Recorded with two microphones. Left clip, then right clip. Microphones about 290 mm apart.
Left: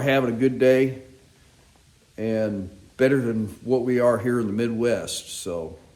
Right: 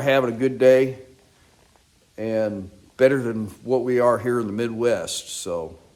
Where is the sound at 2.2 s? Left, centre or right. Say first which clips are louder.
Right 1 dB; centre.